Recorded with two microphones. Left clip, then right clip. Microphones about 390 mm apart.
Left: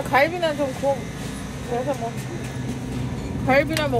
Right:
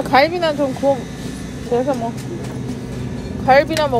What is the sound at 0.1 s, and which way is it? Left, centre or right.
Speech, right.